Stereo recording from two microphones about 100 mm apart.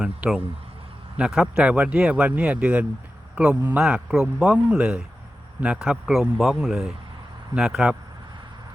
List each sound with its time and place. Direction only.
0.0 s a man's voice: 10° right (ahead or behind)